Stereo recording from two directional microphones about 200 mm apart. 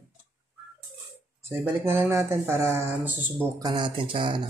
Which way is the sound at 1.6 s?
10° right (ahead or behind).